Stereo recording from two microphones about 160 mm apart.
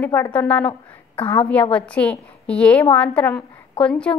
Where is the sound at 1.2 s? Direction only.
35° left (ahead or behind).